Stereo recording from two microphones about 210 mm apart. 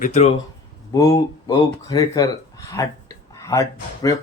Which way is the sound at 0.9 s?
15° left (ahead or behind).